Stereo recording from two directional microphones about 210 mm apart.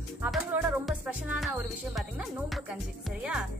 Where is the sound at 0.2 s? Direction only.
10° right (ahead or behind).